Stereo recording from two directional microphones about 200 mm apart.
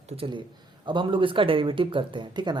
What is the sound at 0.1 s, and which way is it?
Speech, 25° right (ahead or behind).